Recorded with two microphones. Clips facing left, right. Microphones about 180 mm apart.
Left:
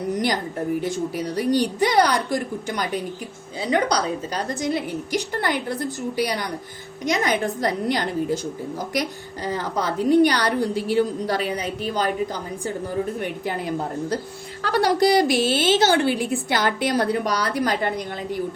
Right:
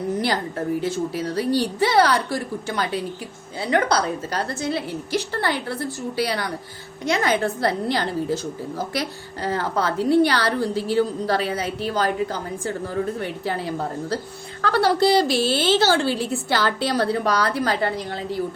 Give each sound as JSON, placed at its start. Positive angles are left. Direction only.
{"t": 0.1, "sound": "a woman's voice", "side_deg": 15}